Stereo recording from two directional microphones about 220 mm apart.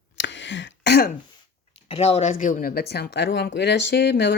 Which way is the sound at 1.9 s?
30° left (ahead or behind).